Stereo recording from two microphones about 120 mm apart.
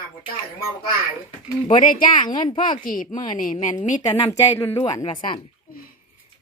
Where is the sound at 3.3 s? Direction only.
85° left.